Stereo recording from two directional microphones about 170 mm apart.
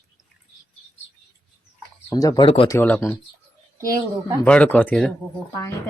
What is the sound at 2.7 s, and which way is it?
Speech, 10° left (ahead or behind).